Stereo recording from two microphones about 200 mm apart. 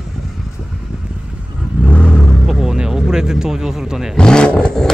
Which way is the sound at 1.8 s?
5° left (ahead or behind).